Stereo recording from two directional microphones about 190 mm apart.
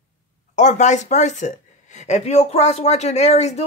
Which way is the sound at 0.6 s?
40° left (ahead or behind).